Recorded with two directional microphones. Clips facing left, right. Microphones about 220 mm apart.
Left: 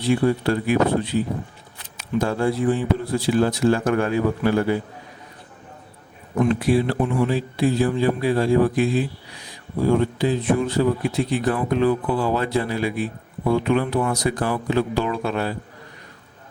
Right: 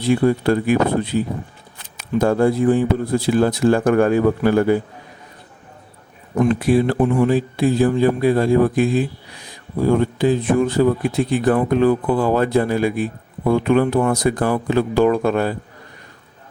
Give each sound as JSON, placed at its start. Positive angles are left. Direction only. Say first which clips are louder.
{"t": 0.4, "sound": "speech", "louder": "right 3 dB", "side_deg": -50}
{"t": 6.6, "sound": "speech", "louder": "right 4 dB", "side_deg": -50}
{"t": 10.2, "sound": "speech", "louder": "right 4 dB", "side_deg": -50}